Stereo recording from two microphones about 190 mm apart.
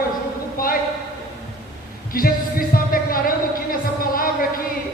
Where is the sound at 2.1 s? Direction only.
50° left (ahead or behind).